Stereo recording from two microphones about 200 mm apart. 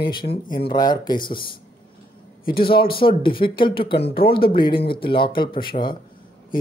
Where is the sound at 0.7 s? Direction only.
20° left (ahead or behind).